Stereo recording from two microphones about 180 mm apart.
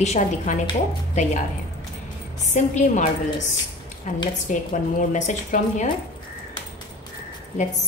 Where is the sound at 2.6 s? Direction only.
40° left (ahead or behind).